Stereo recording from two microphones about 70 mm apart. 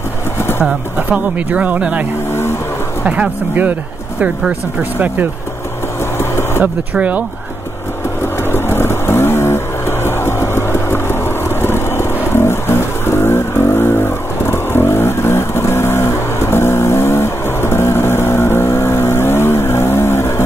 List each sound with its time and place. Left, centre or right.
0.4 s pigeon: left
0.9 s speech: right
3.1 s speech: right
6.1 s vehicle: left
6.6 s speech: right
8.5 s vehicle: left